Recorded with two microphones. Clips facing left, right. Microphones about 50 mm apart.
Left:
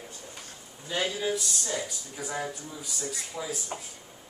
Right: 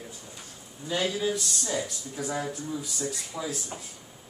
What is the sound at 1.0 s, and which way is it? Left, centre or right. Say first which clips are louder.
Speech: right 2 dB; left.